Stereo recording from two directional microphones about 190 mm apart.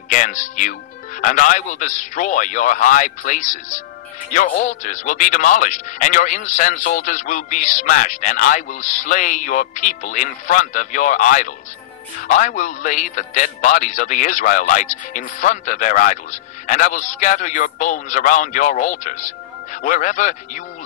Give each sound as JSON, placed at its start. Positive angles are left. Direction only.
{"t": 0.1, "sound": "a man's voice", "side_deg": 40}